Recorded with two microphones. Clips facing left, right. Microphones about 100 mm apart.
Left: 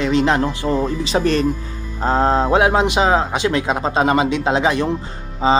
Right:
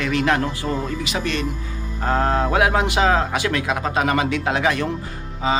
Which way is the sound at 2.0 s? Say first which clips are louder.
Left 4 dB; 25° left (ahead or behind).